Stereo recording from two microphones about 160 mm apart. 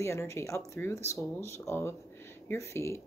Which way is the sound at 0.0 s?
15° left (ahead or behind).